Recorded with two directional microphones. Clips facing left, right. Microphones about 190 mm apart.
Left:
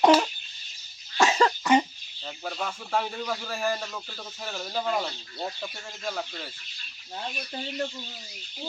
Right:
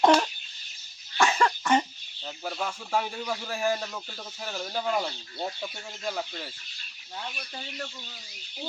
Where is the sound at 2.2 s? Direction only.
5° right (ahead or behind).